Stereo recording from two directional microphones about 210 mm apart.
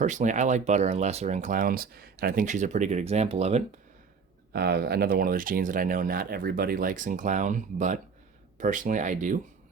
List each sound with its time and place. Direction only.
0.0 s speech: 35° right (ahead or behind)
4.5 s speech: 50° right (ahead or behind)